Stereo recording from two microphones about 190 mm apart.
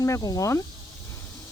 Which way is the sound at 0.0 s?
15° left (ahead or behind).